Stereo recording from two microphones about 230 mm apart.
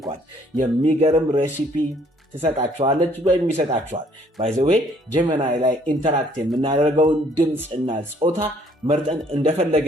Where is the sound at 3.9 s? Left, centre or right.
Right.